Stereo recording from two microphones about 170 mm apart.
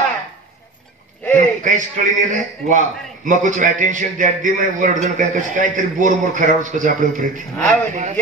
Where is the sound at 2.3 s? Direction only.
50° right (ahead or behind).